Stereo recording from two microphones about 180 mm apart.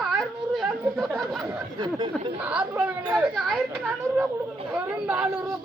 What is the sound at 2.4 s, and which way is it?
Speech, 5° right (ahead or behind).